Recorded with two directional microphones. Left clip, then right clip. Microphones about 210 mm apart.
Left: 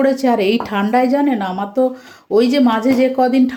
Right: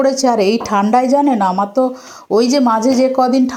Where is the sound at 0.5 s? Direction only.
10° right (ahead or behind).